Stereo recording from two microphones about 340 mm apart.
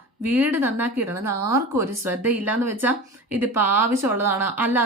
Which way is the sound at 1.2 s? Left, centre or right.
Right.